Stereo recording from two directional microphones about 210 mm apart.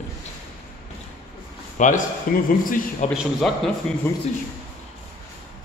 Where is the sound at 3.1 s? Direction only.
Centre (ahead or behind).